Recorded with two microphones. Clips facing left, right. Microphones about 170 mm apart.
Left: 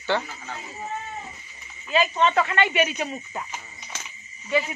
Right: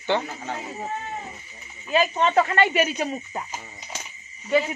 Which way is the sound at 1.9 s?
45° right (ahead or behind).